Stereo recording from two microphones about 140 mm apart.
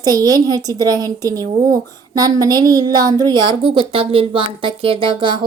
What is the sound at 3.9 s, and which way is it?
Speech, 40° right (ahead or behind).